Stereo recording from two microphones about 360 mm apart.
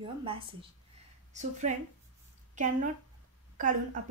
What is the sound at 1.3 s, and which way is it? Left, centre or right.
Speech, centre.